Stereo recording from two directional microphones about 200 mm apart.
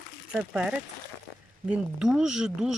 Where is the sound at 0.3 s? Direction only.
5° right (ahead or behind).